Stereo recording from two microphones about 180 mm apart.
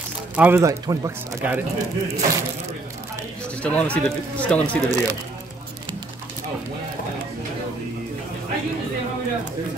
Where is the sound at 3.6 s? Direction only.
5° left (ahead or behind).